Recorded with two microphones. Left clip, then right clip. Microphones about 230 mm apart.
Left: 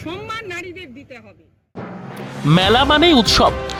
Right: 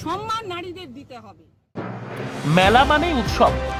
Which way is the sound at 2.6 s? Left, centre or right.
Left.